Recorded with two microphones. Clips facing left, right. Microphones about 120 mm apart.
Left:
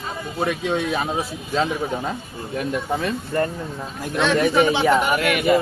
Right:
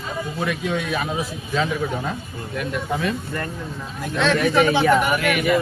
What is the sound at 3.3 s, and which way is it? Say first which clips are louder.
Speech: left 7 dB; 30° left (ahead or behind).